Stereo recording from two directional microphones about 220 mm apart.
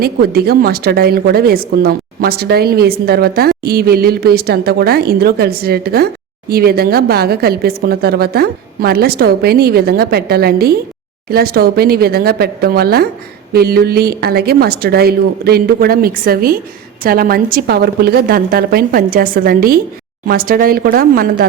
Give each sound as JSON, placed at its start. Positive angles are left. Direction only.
{"t": 0.0, "sound": "a woman's voice", "side_deg": -45}